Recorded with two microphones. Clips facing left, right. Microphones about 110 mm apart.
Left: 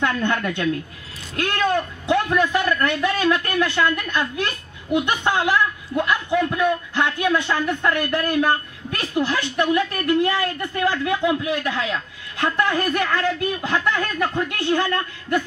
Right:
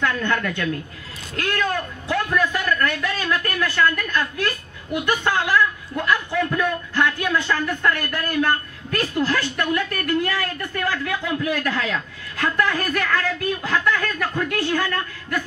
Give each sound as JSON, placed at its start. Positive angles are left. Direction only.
{"t": 0.0, "sound": "speech", "side_deg": 20}